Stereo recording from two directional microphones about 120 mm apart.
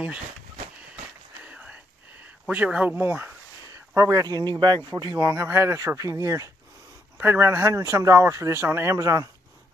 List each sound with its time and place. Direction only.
1.4 s whispering: 10° right (ahead or behind)
2.4 s speech: 10° right (ahead or behind); by 9.3 s 25° right (ahead or behind)